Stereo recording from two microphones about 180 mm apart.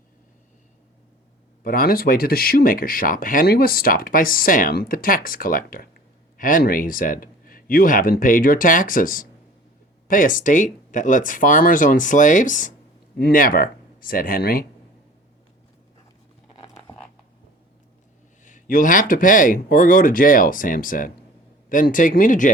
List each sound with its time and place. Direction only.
1.6 s speech: 55° left (ahead or behind)
18.4 s speech: 45° left (ahead or behind)